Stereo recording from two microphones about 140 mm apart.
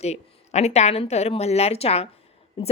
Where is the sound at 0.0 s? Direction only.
50° left (ahead or behind).